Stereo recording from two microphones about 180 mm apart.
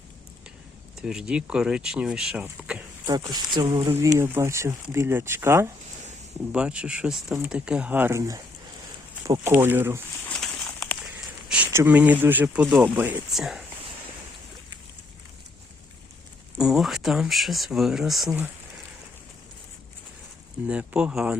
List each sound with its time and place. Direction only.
0.9 s speech: 5° right (ahead or behind)
3.1 s speech: 25° right (ahead or behind)
10.2 s a sound: 5° left (ahead or behind)
12.8 s speech: 10° right (ahead or behind)
16.6 s speech: centre (ahead or behind)
20.7 s speech: 5° right (ahead or behind)